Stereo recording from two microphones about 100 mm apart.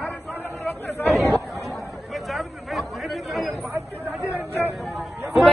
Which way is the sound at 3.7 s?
20° right (ahead or behind).